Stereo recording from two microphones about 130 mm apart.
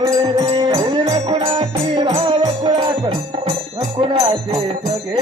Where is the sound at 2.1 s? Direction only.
50° right (ahead or behind).